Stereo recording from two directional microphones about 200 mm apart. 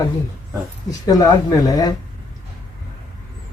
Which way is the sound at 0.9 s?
20° left (ahead or behind).